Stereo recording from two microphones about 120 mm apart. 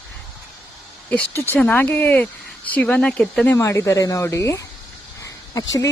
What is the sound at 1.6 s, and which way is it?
Speech, 15° left (ahead or behind).